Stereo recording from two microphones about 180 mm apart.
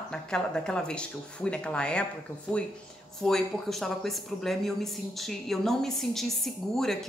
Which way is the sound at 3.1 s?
Centre (ahead or behind).